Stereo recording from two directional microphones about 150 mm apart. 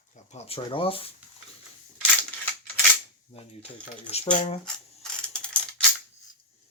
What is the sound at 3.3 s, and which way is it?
Speech, 40° left (ahead or behind).